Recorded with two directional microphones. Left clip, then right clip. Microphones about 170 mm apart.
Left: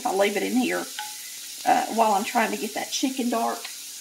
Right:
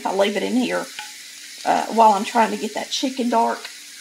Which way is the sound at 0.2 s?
30° right (ahead or behind).